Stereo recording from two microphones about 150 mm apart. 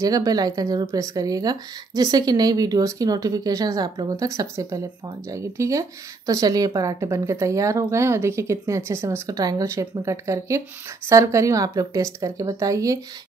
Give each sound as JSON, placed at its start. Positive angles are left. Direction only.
{"t": 0.0, "sound": "speech", "side_deg": -25}